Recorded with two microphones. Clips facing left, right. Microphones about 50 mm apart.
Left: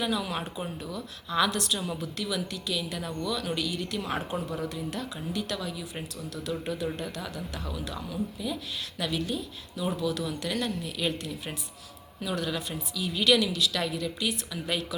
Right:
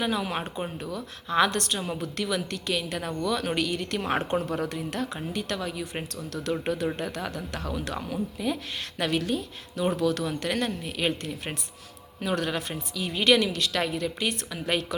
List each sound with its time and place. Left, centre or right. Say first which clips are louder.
0.0 s speech: right 2 dB; right
4.4 s speech: right 3 dB; right
10.2 s speech: right 3 dB; right